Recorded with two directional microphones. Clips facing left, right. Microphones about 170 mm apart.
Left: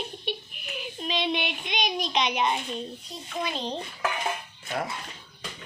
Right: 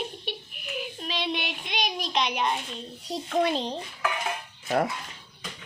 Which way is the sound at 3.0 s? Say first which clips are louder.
Right 13 dB; 75° right (ahead or behind).